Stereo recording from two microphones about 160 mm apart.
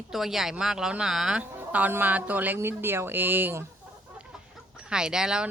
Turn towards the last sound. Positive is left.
turn(degrees=-5)  # may be behind; listen again after turning